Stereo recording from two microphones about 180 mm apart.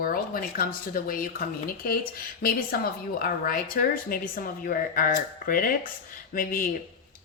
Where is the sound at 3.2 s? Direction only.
55° left (ahead or behind).